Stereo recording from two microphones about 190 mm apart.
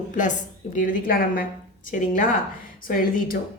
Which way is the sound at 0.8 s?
45° left (ahead or behind).